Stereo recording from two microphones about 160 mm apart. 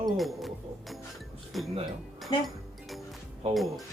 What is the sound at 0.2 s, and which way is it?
Music, centre (ahead or behind).